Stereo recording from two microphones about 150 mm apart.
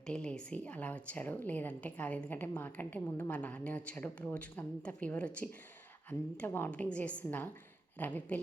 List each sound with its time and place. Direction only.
0.1 s a woman's voice: 5° left (ahead or behind)